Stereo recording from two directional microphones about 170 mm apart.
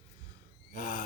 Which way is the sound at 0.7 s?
55° left (ahead or behind).